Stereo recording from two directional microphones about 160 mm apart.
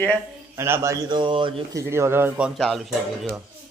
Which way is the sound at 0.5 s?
15° right (ahead or behind).